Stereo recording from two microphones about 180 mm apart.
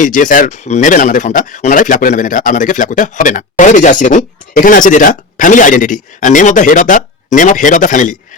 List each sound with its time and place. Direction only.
0.0 s speech: 45° left (ahead or behind)